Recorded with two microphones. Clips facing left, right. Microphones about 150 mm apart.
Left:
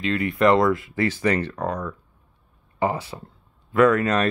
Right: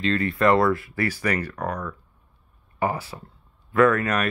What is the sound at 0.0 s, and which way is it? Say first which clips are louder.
Speech: left 1 dB; 15° left (ahead or behind).